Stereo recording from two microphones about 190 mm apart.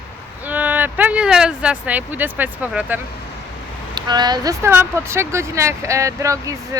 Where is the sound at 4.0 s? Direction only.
20° right (ahead or behind).